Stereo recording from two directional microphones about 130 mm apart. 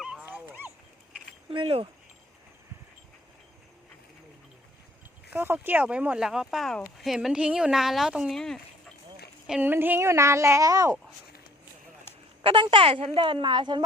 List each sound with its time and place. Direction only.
0.0 s dog: 10° right (ahead or behind)
1.5 s speech: 40° right (ahead or behind)
5.3 s speech: 15° right (ahead or behind); by 8.6 s centre (ahead or behind)
9.5 s speech: 15° right (ahead or behind)
12.4 s a woman's voice: 40° right (ahead or behind)